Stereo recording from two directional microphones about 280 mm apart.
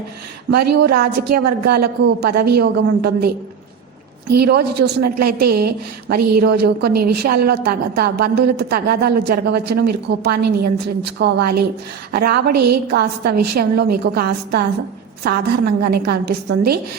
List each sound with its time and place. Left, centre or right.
0.5 s a woman's voice: right